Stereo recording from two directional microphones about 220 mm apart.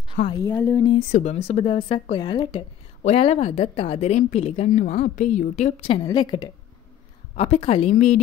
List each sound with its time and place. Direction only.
0.3 s a woman's voice: 15° left (ahead or behind)
1.1 s speech: 30° left (ahead or behind)
6.0 s a woman's voice: 20° left (ahead or behind)